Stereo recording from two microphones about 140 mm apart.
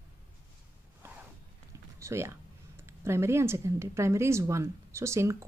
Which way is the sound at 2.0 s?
20° right (ahead or behind).